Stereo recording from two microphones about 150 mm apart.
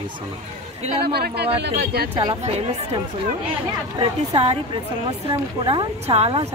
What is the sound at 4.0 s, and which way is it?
A woman's voice, 40° right (ahead or behind).